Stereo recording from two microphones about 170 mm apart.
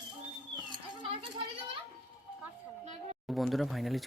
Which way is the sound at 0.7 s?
30° right (ahead or behind).